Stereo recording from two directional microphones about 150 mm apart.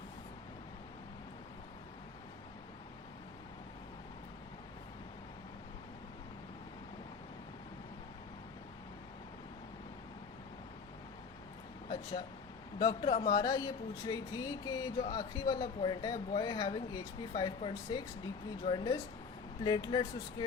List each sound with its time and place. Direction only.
12.8 s speech: 35° left (ahead or behind)